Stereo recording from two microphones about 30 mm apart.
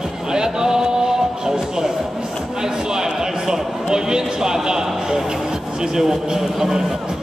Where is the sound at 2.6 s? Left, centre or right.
Centre.